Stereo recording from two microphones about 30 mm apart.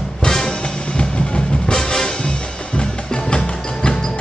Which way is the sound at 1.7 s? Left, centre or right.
Centre.